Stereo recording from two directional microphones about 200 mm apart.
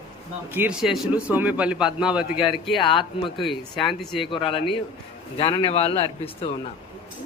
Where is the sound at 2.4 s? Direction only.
25° left (ahead or behind).